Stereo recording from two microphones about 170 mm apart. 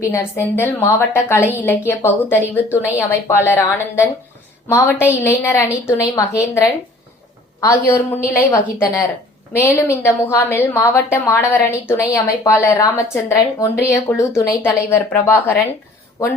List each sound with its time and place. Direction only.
0.1 s a woman's voice: 15° left (ahead or behind)